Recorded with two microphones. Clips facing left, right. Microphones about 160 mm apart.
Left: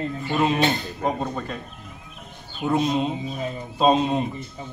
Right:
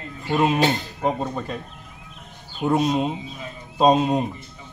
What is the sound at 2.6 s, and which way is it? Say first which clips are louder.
Speech: right 2 dB; 35° right (ahead or behind).